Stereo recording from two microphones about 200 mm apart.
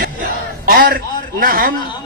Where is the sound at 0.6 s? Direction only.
45° right (ahead or behind).